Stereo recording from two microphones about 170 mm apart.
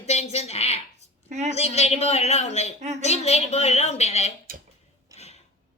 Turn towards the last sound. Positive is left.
turn(degrees=40)  # may be behind; listen again after turning